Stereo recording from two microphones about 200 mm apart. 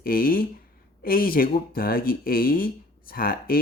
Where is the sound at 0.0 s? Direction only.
45° left (ahead or behind).